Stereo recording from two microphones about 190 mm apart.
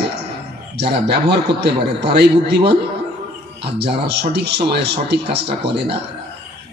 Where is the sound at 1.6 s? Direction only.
60° right (ahead or behind).